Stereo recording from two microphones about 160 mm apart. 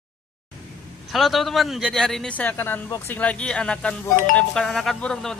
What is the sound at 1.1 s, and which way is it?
Speech, centre (ahead or behind).